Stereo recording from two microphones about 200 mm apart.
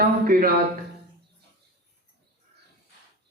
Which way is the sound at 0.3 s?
45° right (ahead or behind).